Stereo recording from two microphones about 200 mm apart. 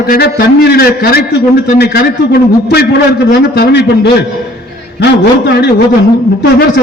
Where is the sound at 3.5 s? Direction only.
55° left (ahead or behind).